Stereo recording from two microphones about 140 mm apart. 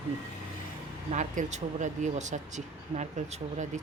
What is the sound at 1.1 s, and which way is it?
Speech, 60° right (ahead or behind).